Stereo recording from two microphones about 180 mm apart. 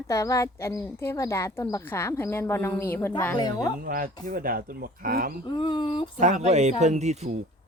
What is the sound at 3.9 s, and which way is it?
Speech, 50° right (ahead or behind).